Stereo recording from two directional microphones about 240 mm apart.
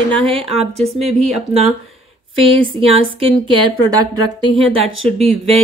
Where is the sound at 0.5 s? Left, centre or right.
Centre.